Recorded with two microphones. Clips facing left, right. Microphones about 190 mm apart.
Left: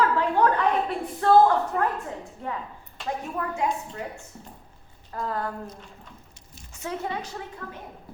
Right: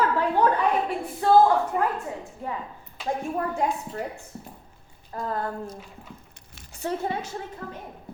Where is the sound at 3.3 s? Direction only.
35° right (ahead or behind).